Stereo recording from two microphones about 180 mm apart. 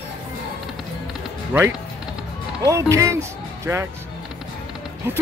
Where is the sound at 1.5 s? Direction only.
10° right (ahead or behind).